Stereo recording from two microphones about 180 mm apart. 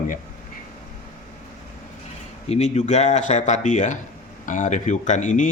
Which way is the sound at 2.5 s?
40° left (ahead or behind).